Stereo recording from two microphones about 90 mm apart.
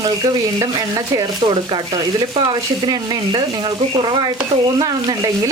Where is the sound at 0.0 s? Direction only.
45° right (ahead or behind).